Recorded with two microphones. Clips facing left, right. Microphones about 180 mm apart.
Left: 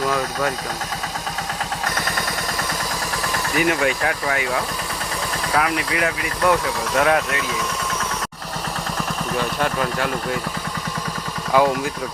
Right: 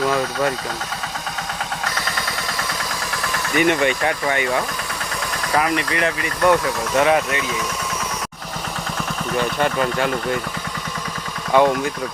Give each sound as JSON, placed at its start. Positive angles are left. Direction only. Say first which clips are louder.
{"t": 3.5, "sound": "speech", "louder": "right 3 dB", "side_deg": 5}
{"t": 9.4, "sound": "speech", "louder": "right 3 dB", "side_deg": 0}
{"t": 11.5, "sound": "speech", "louder": "right 2 dB", "side_deg": 5}